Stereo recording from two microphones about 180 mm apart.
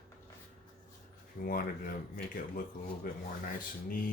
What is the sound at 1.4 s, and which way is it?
Speech, 55° left (ahead or behind).